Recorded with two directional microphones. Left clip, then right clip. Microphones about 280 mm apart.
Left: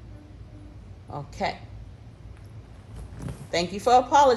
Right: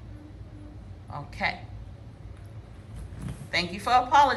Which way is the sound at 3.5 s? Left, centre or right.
Left.